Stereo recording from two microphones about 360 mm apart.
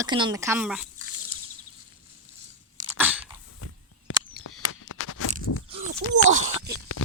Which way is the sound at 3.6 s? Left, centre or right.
Left.